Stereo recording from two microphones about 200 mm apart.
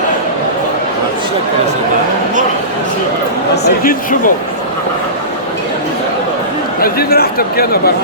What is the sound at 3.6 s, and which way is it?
Speech, 45° left (ahead or behind).